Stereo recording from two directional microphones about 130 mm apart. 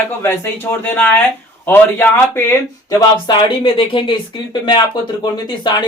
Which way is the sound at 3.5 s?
40° left (ahead or behind).